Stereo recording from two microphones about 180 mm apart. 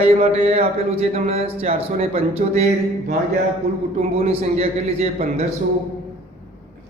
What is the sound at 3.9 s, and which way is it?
Speech, 35° right (ahead or behind).